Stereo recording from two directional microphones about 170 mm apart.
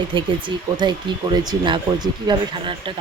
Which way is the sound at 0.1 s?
30° right (ahead or behind).